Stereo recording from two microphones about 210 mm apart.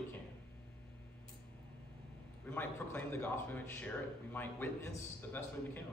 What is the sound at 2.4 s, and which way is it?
A man's voice, 10° left (ahead or behind).